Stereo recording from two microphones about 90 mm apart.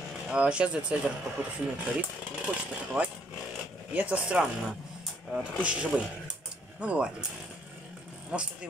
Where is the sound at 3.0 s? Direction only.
20° right (ahead or behind).